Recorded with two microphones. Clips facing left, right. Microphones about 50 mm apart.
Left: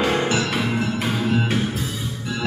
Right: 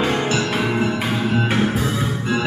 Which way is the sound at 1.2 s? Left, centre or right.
Right.